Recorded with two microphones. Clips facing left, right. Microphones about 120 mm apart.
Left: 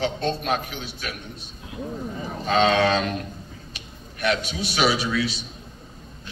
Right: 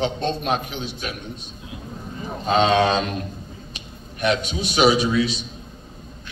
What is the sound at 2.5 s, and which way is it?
A man's voice, 25° right (ahead or behind).